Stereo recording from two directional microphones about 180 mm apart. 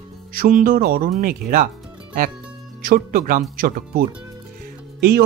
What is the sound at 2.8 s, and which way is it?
Speech, 55° right (ahead or behind).